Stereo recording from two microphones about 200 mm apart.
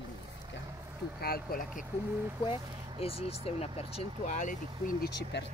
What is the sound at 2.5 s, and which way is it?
Speech, 30° left (ahead or behind).